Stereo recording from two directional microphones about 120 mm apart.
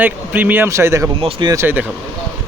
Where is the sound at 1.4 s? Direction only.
40° right (ahead or behind).